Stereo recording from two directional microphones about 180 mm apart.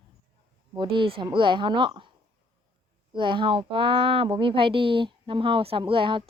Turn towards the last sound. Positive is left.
turn(degrees=-30)  # may be behind; listen again after turning